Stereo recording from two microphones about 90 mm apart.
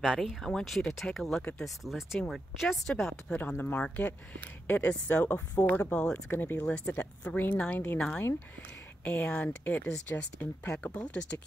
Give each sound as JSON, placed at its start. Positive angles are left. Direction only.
{"t": 0.0, "sound": "speech", "side_deg": -5}
{"t": 3.3, "sound": "speech", "side_deg": 20}
{"t": 9.0, "sound": "speech", "side_deg": 15}